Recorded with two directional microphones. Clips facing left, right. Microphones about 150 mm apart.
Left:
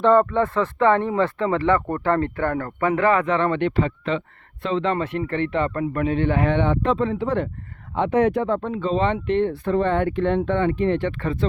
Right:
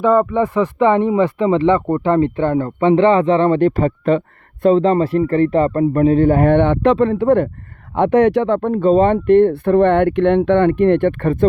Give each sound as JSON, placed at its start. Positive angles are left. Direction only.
{"t": 0.0, "sound": "a man's voice", "side_deg": -5}
{"t": 8.7, "sound": "speech", "side_deg": -50}